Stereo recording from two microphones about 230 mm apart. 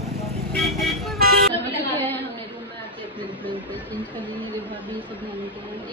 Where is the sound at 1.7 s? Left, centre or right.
Centre.